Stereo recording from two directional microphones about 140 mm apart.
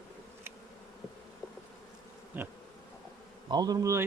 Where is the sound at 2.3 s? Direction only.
10° right (ahead or behind).